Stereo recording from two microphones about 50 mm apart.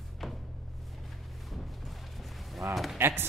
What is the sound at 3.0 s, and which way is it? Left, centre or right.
Speech, right.